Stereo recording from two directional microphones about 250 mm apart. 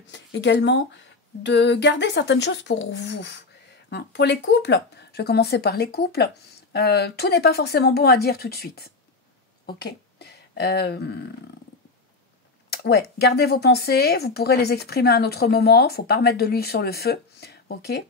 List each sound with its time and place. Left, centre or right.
0.0 s speech: left
12.6 s speech: left